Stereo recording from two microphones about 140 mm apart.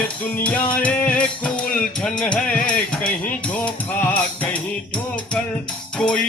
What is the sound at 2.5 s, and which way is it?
Speech, 85° left.